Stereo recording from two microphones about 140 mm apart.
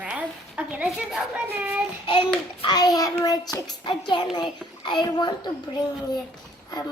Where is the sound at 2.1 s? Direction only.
40° left (ahead or behind).